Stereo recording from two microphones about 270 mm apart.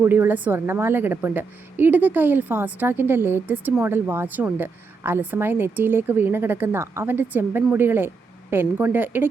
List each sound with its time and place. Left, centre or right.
0.0 s a woman's voice: centre